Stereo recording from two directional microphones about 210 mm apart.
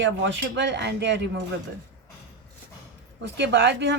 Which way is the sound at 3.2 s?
55° right (ahead or behind).